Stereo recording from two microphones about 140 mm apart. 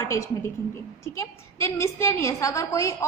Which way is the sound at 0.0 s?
20° left (ahead or behind).